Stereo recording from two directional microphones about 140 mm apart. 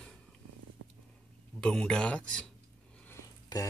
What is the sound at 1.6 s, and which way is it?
Speech, 5° left (ahead or behind).